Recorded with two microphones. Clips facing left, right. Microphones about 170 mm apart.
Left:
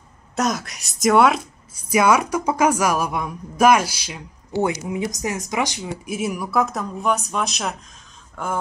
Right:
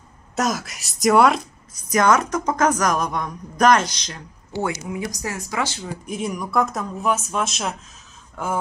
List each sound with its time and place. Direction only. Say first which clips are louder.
0.4 s a woman's voice: left 1 dB; centre (ahead or behind)
4.6 s a woman's voice: left 4 dB; 20° left (ahead or behind); by 7.7 s centre (ahead or behind)